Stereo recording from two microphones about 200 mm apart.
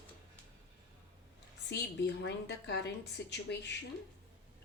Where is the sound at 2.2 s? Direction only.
55° left (ahead or behind).